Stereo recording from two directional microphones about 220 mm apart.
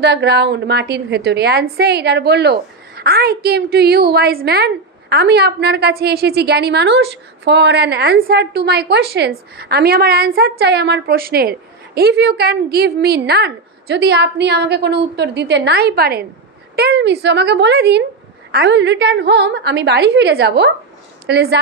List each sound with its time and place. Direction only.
0.0 s a woman's voice: 50° right (ahead or behind)